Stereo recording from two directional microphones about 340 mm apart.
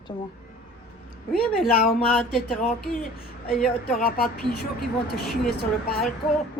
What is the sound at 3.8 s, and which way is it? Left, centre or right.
Speech, left.